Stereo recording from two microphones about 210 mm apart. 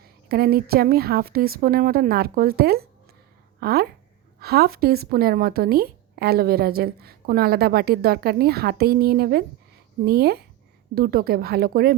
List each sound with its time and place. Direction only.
0.0 s a woman's voice: 45° right (ahead or behind)